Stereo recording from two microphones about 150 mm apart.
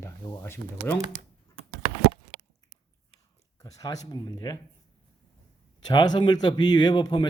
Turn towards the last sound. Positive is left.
turn(degrees=30)  # may be behind; listen again after turning